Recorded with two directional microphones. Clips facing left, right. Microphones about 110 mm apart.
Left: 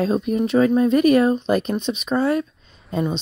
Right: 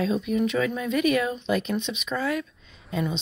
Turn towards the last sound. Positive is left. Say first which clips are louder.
# left 5 dB
turn(degrees=40)  # may be behind; listen again after turning